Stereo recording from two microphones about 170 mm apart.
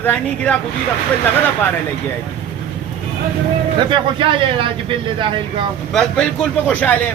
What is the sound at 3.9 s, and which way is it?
Speech, 30° right (ahead or behind).